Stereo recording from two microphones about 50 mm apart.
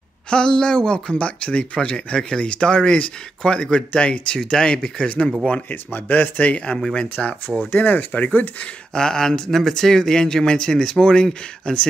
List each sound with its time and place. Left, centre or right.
0.3 s speech: centre
5.7 s speech: left
6.9 s speech: left
7.7 s speech: left
8.9 s speech: centre